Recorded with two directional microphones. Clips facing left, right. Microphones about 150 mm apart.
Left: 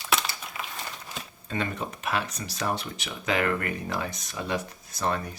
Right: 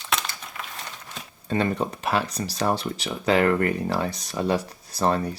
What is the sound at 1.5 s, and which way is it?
Speech, 35° right (ahead or behind).